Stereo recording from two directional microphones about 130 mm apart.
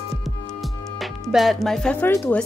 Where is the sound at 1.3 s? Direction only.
Centre (ahead or behind).